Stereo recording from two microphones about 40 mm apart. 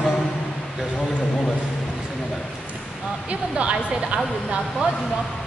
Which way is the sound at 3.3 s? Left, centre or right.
Right.